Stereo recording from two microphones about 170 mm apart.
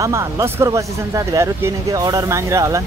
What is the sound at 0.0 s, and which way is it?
Speech, 20° right (ahead or behind).